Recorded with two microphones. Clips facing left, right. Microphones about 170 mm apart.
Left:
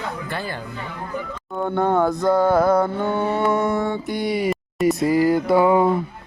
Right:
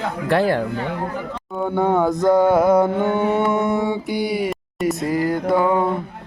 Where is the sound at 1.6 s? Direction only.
10° right (ahead or behind); by 5.9 s 5° left (ahead or behind).